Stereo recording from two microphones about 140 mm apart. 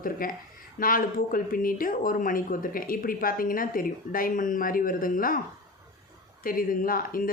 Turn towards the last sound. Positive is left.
turn(degrees=90)